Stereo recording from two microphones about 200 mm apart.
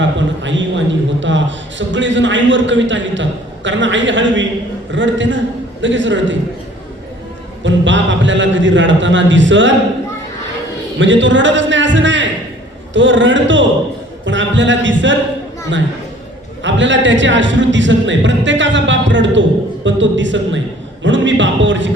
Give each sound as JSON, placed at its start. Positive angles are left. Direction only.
{"t": 0.0, "sound": "a man's voice", "side_deg": -65}
{"t": 7.6, "sound": "speech", "side_deg": -65}
{"t": 10.9, "sound": "a man's voice", "side_deg": -65}
{"t": 14.3, "sound": "a sound", "side_deg": -65}
{"t": 16.6, "sound": "a man's voice", "side_deg": -65}